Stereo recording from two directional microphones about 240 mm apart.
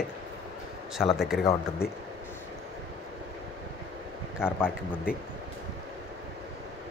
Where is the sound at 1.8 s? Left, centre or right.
Left.